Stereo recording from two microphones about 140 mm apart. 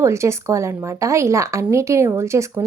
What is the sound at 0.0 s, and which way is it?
Speech, 20° right (ahead or behind).